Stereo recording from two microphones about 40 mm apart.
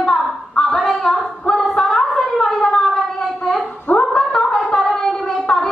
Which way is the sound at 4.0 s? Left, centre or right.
Centre.